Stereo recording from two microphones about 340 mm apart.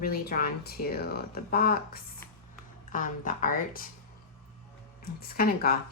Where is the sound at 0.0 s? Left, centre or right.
Left.